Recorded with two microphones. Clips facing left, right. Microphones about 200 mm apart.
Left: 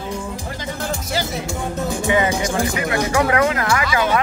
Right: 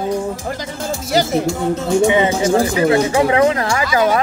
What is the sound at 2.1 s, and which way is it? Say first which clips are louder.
Speech: right 5 dB; 25° right (ahead or behind).